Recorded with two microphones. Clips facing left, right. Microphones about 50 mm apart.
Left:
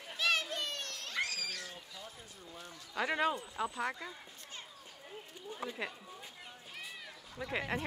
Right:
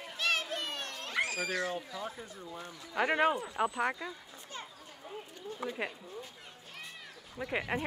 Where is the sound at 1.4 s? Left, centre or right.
Right.